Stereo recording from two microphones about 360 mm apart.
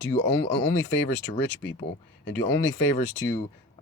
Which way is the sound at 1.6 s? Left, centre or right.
Left.